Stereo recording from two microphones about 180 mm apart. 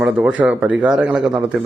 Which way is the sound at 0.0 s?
5° right (ahead or behind).